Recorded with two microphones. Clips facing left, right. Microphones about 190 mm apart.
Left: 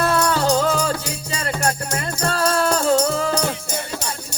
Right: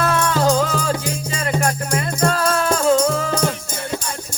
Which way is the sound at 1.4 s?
40° left (ahead or behind).